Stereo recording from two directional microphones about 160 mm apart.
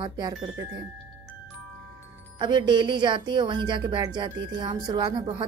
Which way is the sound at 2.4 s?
30° right (ahead or behind).